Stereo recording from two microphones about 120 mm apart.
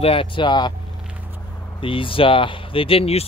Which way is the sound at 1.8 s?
45° left (ahead or behind).